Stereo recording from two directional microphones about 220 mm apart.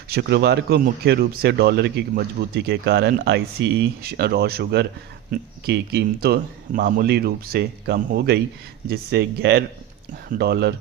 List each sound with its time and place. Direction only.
0.1 s speech: 50° right (ahead or behind)